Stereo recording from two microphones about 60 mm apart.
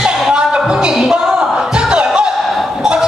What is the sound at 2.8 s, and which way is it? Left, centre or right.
Honk, centre.